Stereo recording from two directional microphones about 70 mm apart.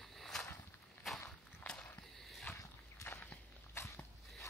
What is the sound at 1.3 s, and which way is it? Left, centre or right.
Walk, centre.